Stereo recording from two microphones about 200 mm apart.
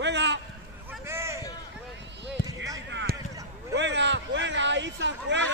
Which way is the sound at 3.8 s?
65° right (ahead or behind).